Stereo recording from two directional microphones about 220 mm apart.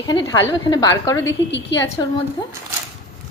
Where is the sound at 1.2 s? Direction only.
55° left (ahead or behind).